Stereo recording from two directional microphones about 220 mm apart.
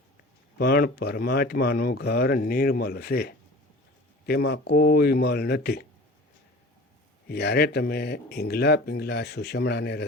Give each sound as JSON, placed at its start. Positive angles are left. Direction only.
{"t": 0.6, "sound": "speech", "side_deg": 45}
{"t": 7.3, "sound": "speech", "side_deg": 50}